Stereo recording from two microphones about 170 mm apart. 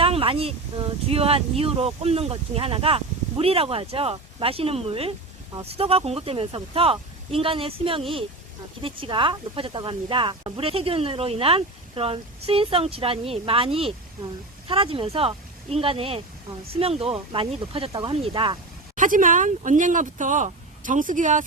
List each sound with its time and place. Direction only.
0.0 s speech: 35° right (ahead or behind)
18.9 s speech: 50° right (ahead or behind)